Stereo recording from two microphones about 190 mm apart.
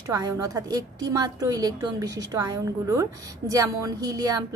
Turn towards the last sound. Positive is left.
turn(degrees=-20)  # may be behind; listen again after turning